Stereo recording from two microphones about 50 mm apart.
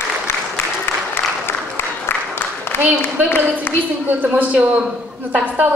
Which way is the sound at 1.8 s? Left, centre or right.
Left.